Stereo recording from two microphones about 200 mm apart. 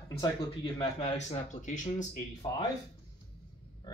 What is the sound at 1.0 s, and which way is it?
Speech, 35° left (ahead or behind).